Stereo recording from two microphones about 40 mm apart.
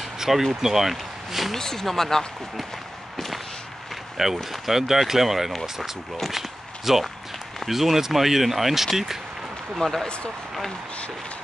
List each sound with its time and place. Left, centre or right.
0.2 s speech: centre
1.5 s speech: centre
3.9 s a sound: centre
4.4 s speech: centre
6.2 s walk: centre
7.6 s speech: centre
9.8 s speech: centre
10.0 s speech: left